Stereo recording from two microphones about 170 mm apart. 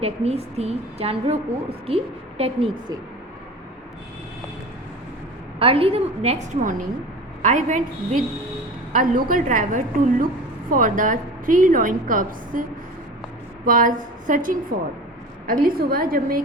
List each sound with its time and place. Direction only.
0.0 s a woman's voice: 35° right (ahead or behind)
5.5 s a woman's voice: 35° right (ahead or behind); by 12.6 s 55° right (ahead or behind)
13.7 s a woman's voice: 55° right (ahead or behind)